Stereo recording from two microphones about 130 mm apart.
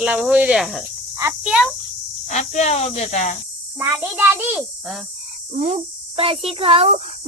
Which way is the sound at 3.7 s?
15° right (ahead or behind).